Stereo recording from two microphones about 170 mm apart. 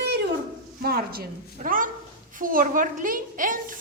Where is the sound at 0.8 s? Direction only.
65° right (ahead or behind).